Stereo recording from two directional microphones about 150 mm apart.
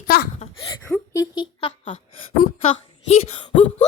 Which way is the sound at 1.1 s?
25° left (ahead or behind).